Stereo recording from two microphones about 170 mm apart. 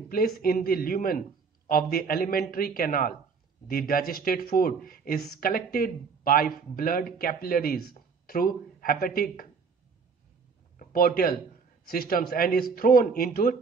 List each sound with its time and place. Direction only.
0.4 s speech: 60° left (ahead or behind)
10.8 s speech: 60° left (ahead or behind)